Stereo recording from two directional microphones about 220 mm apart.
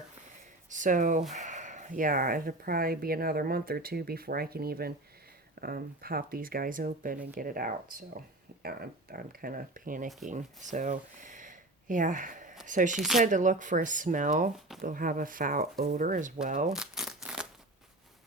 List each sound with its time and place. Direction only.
0.7 s speech: 35° right (ahead or behind)
13.0 s speech: centre (ahead or behind)
13.2 s speech: 35° right (ahead or behind)
16.6 s crumpling: centre (ahead or behind)